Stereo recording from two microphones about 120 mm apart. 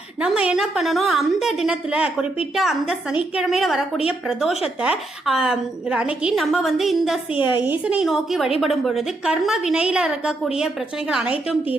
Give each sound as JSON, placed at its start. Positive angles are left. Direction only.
{"t": 0.2, "sound": "a woman's voice", "side_deg": -10}
{"t": 7.3, "sound": "a woman's voice", "side_deg": 40}
{"t": 7.6, "sound": "a woman's voice", "side_deg": -10}